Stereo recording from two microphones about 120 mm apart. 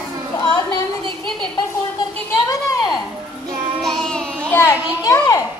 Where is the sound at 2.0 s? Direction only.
35° left (ahead or behind).